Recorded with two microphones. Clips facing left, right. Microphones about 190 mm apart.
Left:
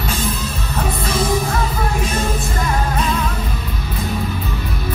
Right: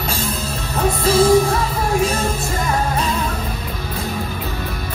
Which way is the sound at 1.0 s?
30° right (ahead or behind).